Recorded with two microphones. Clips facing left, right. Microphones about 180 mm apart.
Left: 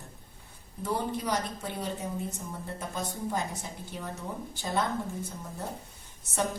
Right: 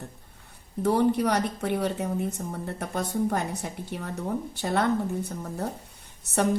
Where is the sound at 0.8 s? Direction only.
65° right (ahead or behind).